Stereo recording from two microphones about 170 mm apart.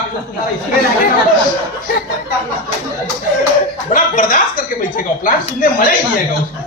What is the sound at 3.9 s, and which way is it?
A man's voice, 50° left (ahead or behind).